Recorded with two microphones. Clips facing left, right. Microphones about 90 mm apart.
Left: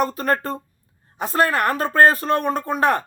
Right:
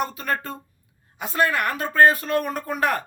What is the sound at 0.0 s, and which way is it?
Speech, 40° left (ahead or behind).